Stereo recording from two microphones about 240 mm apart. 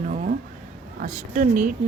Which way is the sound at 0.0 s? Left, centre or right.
Right.